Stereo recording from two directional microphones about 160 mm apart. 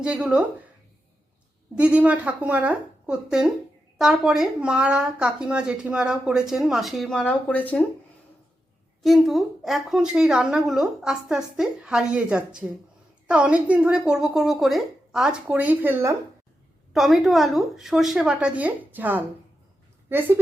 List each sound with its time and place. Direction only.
0.0 s a woman's voice: 5° right (ahead or behind)
1.7 s a woman's voice: 5° right (ahead or behind); by 7.9 s 10° left (ahead or behind)
9.0 s speech: centre (ahead or behind)
16.9 s a woman's voice: centre (ahead or behind)